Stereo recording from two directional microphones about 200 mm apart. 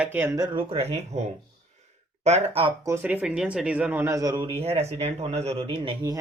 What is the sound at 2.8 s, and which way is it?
Speech, 10° right (ahead or behind).